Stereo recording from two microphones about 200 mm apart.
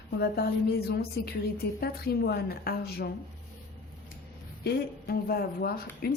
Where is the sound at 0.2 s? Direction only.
50° left (ahead or behind).